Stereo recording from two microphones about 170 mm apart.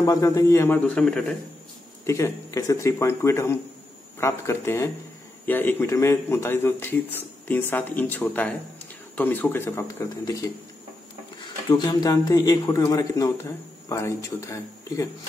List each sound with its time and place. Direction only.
0.0 s a man's voice: 20° left (ahead or behind)
2.0 s a man's voice: 15° left (ahead or behind)
11.7 s a man's voice: 25° left (ahead or behind)